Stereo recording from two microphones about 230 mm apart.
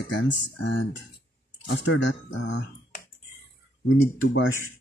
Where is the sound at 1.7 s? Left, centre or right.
Left.